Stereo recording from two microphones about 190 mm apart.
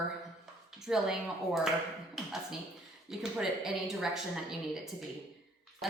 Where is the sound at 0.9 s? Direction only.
Centre (ahead or behind).